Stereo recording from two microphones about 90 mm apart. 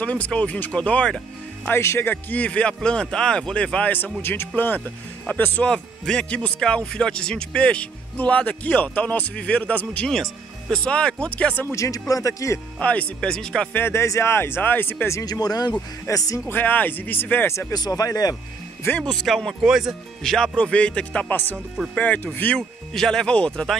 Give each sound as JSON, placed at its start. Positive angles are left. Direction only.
{"t": 0.0, "sound": "speech", "side_deg": 15}
{"t": 1.7, "sound": "speech", "side_deg": 30}
{"t": 11.7, "sound": "speech", "side_deg": 35}
{"t": 12.7, "sound": "speech", "side_deg": 15}
{"t": 13.7, "sound": "speech", "side_deg": 25}
{"t": 15.2, "sound": "speech", "side_deg": 45}
{"t": 16.4, "sound": "speech", "side_deg": 20}
{"t": 17.7, "sound": "speech", "side_deg": 45}
{"t": 18.9, "sound": "speech", "side_deg": 10}
{"t": 20.2, "sound": "speech", "side_deg": 5}
{"t": 22.6, "sound": "speech", "side_deg": 5}